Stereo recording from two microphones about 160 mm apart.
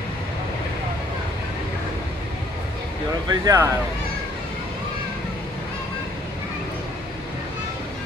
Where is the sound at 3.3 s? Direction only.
20° right (ahead or behind).